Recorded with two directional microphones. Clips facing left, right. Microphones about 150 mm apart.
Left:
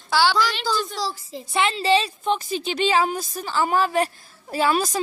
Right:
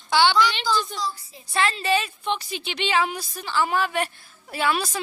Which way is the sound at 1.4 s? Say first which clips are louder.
Left 3 dB; 20° left (ahead or behind).